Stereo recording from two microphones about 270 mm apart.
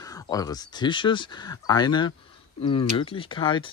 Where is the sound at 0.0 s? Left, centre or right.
Centre.